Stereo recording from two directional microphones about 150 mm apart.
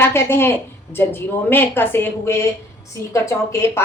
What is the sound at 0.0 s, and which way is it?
A woman's voice, 15° left (ahead or behind).